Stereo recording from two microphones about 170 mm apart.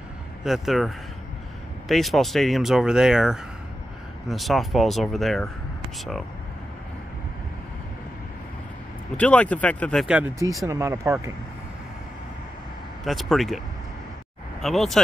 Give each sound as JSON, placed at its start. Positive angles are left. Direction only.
{"t": 0.4, "sound": "speech", "side_deg": 0}
{"t": 9.1, "sound": "speech", "side_deg": 5}
{"t": 10.0, "sound": "speech", "side_deg": -5}
{"t": 10.7, "sound": "speech", "side_deg": -20}
{"t": 13.0, "sound": "speech", "side_deg": 0}
{"t": 14.6, "sound": "speech", "side_deg": 0}